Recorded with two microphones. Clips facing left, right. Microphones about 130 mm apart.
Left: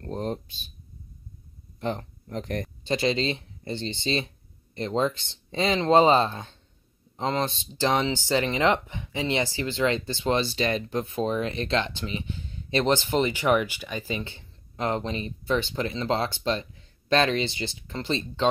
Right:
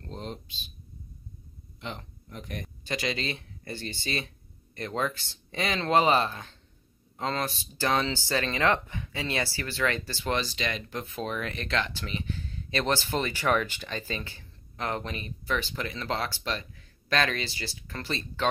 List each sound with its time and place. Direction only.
0.0 s a sound: 50° left (ahead or behind)
1.8 s speech: 45° left (ahead or behind)
2.8 s speech: 30° left (ahead or behind)